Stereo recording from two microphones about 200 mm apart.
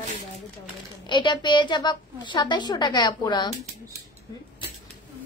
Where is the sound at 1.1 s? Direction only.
20° left (ahead or behind).